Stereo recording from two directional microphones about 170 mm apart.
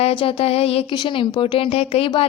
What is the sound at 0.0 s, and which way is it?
A woman's voice, 35° left (ahead or behind).